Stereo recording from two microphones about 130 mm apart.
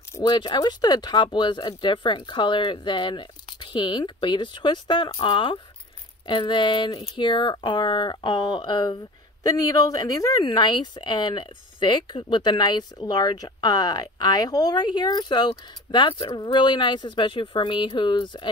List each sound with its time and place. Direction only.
0.2 s speech: 35° left (ahead or behind)